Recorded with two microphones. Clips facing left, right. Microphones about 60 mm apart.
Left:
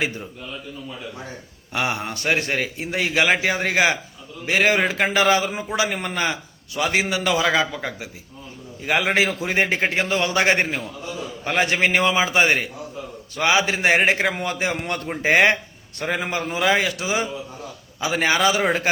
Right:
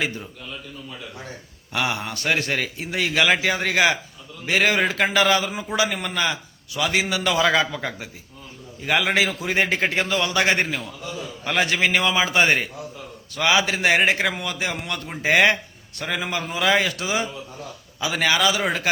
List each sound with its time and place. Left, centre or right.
1.7 s a man's voice: left
7.4 s a man's voice: centre
9.0 s a man's voice: left; by 12.6 s centre
13.3 s a man's voice: left
14.8 s a man's voice: left
15.2 s a man's voice: left
16.6 s a man's voice: centre